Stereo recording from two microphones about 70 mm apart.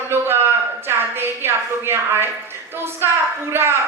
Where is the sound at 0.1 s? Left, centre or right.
Right.